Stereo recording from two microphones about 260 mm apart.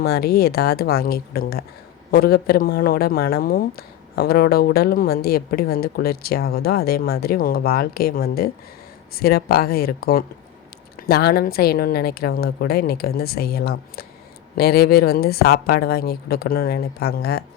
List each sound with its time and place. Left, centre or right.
0.0 s speech: left